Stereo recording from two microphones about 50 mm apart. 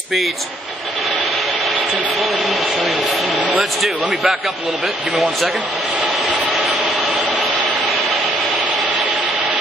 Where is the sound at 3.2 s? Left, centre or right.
Right.